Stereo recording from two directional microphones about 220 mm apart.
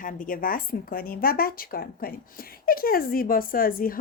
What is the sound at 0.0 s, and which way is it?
A woman's voice, 40° left (ahead or behind).